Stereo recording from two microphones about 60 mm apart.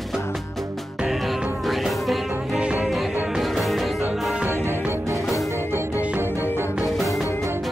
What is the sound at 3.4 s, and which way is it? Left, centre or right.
Music, centre.